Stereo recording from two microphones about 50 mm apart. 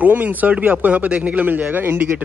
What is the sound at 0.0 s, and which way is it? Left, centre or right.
Speech, right.